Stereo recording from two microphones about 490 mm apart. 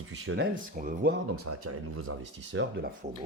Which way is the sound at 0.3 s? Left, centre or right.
Right.